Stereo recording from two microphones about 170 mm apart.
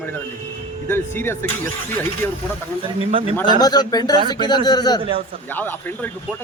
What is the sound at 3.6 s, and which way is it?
Speech, 25° left (ahead or behind).